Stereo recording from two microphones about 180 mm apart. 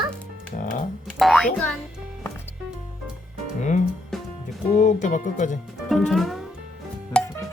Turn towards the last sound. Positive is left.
turn(degrees=5)  # may be behind; listen again after turning